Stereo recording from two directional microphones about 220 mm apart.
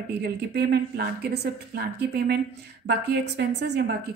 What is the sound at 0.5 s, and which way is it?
A woman's voice, 50° right (ahead or behind).